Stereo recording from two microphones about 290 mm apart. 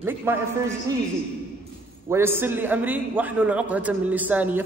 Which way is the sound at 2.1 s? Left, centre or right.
Centre.